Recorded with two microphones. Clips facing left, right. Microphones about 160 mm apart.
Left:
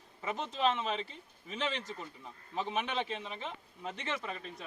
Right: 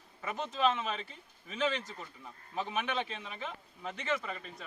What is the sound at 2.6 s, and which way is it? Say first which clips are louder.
Speech: even; 30° left (ahead or behind).